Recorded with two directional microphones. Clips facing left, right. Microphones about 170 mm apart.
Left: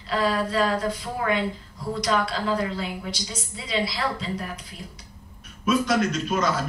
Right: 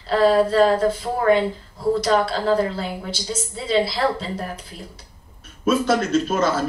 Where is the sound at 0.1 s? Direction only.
30° right (ahead or behind).